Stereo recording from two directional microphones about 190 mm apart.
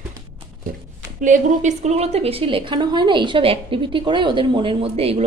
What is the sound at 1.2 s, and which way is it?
A woman's voice, 40° right (ahead or behind).